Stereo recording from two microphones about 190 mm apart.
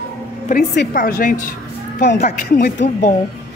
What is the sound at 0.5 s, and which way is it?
Speech, 50° left (ahead or behind).